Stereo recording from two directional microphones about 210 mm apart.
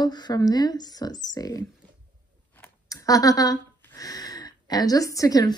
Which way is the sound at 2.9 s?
15° left (ahead or behind).